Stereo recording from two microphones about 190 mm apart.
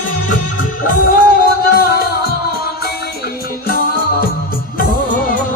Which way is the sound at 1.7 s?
55° left (ahead or behind).